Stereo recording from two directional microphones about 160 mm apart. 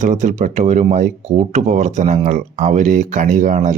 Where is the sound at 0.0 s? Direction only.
50° right (ahead or behind).